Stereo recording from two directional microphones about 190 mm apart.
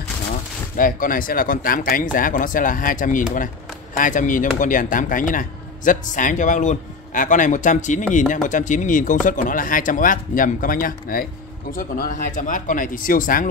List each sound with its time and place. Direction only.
0.7 s speech: 45° left (ahead or behind)